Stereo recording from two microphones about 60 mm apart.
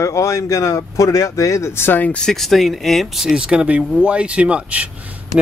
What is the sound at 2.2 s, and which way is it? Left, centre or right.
Speech, centre.